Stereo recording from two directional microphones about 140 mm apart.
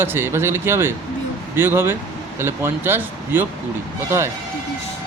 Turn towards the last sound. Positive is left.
turn(degrees=-20)  # may be behind; listen again after turning